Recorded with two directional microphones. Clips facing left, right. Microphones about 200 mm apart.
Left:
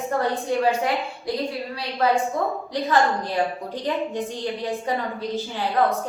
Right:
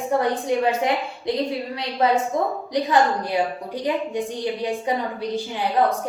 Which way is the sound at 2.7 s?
15° right (ahead or behind).